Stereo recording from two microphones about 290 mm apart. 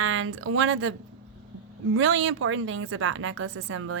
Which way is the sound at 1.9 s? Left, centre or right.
Right.